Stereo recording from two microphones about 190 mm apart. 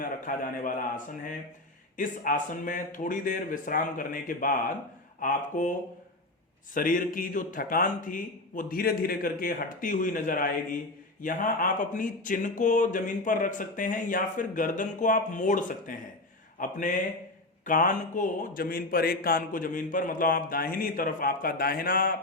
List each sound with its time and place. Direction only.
0.3 s speech: 45° left (ahead or behind)
6.7 s speech: 45° left (ahead or behind)